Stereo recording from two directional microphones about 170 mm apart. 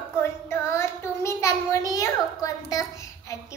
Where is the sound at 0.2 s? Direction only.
15° left (ahead or behind).